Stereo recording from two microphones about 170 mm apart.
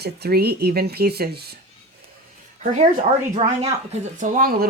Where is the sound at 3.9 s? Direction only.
50° right (ahead or behind).